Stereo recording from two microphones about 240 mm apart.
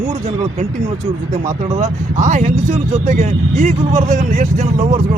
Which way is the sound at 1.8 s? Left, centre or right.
Right.